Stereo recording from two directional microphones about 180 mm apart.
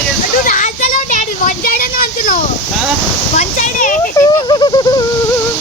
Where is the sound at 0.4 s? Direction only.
45° left (ahead or behind).